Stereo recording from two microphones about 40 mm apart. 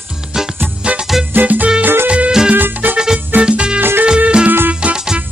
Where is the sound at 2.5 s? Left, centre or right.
Right.